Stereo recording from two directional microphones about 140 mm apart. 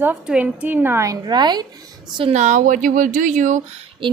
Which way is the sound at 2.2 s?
50° right (ahead or behind).